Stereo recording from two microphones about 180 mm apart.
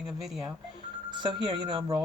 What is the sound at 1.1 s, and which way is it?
Speech, 25° right (ahead or behind).